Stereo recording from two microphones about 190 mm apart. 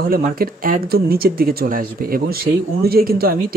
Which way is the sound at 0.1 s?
50° right (ahead or behind).